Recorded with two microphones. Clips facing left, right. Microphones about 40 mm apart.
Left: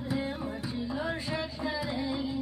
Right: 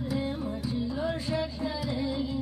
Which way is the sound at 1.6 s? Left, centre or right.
Left.